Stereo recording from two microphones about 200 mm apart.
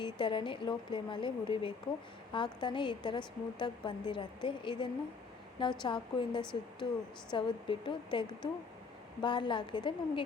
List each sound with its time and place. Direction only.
0.0 s a woman's voice: 25° left (ahead or behind)